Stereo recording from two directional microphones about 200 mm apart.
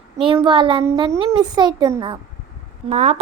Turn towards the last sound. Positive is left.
turn(degrees=-35)  # may be behind; listen again after turning